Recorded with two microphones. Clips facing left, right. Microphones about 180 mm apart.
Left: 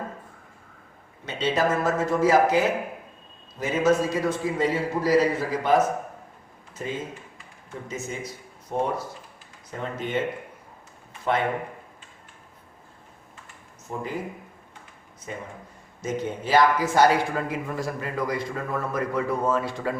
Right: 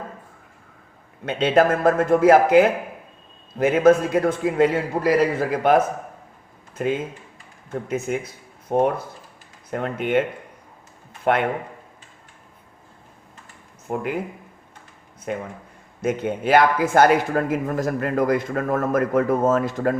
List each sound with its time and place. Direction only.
1.2 s a man's voice: 55° right (ahead or behind)
13.8 s a man's voice: 65° right (ahead or behind)
15.3 s a man's voice: 65° right (ahead or behind); by 20.0 s 45° right (ahead or behind)